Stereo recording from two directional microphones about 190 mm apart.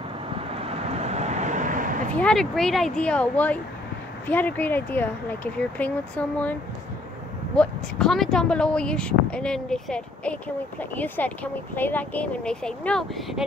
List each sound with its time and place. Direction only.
0.5 s vehicle: 30° right (ahead or behind)
2.1 s speech: 5° left (ahead or behind)
7.5 s speech: 5° left (ahead or behind)